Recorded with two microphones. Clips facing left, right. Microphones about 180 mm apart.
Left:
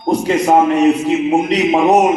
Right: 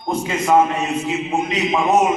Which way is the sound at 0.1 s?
40° left (ahead or behind).